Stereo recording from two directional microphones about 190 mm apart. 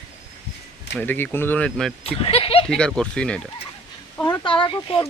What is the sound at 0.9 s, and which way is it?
Speech, 10° left (ahead or behind).